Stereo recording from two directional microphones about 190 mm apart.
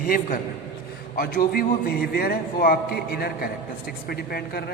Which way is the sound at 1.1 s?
50° left (ahead or behind).